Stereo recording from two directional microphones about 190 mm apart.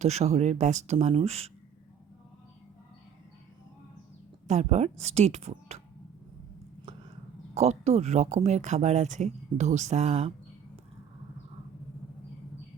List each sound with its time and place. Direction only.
0.0 s speech: 35° right (ahead or behind)
4.4 s speech: 35° right (ahead or behind)
7.5 s speech: 35° right (ahead or behind)